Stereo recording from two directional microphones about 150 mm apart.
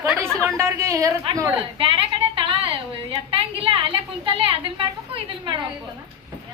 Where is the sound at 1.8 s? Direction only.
35° right (ahead or behind).